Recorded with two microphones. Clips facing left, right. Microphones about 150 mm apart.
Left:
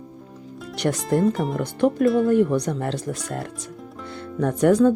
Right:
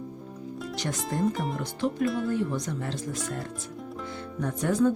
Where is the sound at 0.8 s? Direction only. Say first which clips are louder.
Left 11 dB; 65° left (ahead or behind).